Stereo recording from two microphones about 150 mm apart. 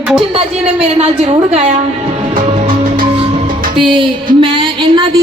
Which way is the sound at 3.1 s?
40° right (ahead or behind).